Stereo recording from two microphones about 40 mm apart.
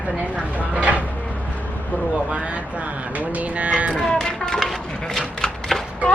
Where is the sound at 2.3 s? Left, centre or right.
Right.